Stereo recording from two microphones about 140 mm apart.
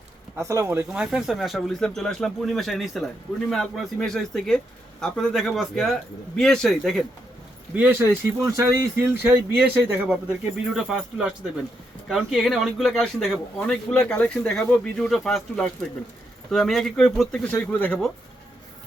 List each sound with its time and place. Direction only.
0.3 s speech: 20° right (ahead or behind)
1.0 s a man's voice: 5° right (ahead or behind)
7.7 s a man's voice: 10° right (ahead or behind); by 18.0 s 10° left (ahead or behind)